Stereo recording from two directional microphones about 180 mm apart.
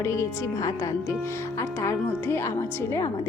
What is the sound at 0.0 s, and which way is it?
Speech, 15° left (ahead or behind).